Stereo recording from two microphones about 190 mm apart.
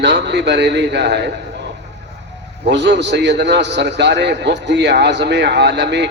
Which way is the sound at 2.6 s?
65° right (ahead or behind).